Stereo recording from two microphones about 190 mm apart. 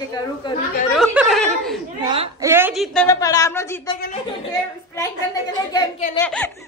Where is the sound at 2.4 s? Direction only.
10° right (ahead or behind).